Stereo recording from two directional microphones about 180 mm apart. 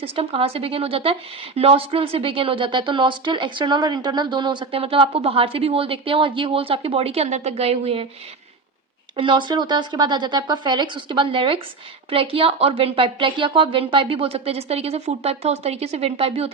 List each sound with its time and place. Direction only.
0.0 s speech: 30° right (ahead or behind)
9.1 s speech: 25° right (ahead or behind)